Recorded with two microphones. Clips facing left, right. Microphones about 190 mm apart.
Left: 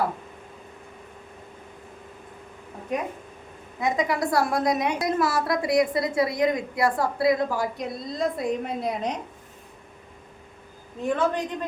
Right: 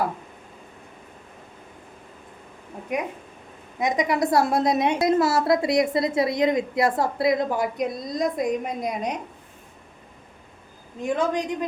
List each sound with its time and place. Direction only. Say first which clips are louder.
2.9 s a woman's voice: right 1 dB; 10° right (ahead or behind)
11.0 s a woman's voice: right 1 dB; 10° right (ahead or behind)